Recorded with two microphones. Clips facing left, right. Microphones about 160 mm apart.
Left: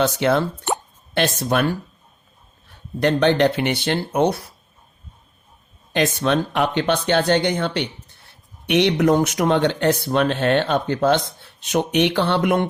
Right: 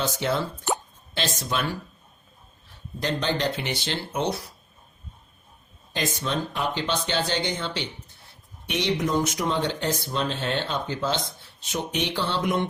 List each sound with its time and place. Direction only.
0.0 s speech: 65° left (ahead or behind)
3.0 s speech: 65° left (ahead or behind)
5.9 s speech: 65° left (ahead or behind)